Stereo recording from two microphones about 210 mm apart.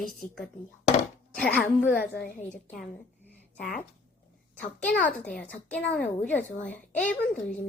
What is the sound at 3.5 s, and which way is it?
Speech, 40° left (ahead or behind).